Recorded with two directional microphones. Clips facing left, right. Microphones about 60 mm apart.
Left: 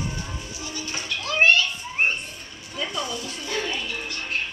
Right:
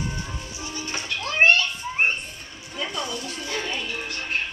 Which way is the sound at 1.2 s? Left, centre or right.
Right.